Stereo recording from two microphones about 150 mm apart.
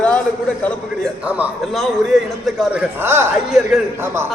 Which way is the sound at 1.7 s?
Centre (ahead or behind).